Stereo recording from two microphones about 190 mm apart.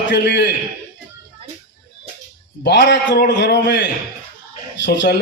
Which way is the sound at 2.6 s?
65° left (ahead or behind).